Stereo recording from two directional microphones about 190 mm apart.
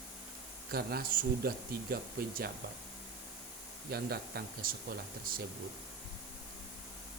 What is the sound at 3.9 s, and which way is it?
Speech, 55° right (ahead or behind).